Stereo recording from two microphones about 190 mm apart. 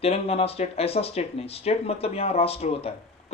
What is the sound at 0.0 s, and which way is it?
Speech, 30° left (ahead or behind).